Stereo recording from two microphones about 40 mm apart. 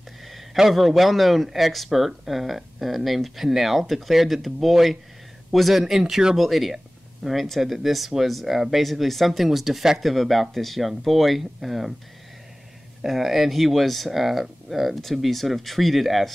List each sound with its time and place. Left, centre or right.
0.6 s speech: centre
13.0 s speech: centre